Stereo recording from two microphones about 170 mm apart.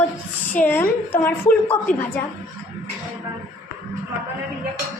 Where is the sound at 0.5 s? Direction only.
10° left (ahead or behind).